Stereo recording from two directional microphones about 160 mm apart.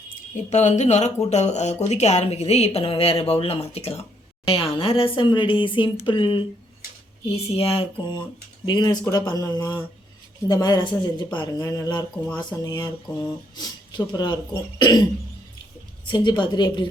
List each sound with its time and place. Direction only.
0.5 s speech: 45° left (ahead or behind); by 11.4 s 30° left (ahead or behind)
11.5 s speech: 15° left (ahead or behind)
12.2 s speech: 5° left (ahead or behind)
12.6 s speech: 20° left (ahead or behind)
16.0 s speech: 30° left (ahead or behind)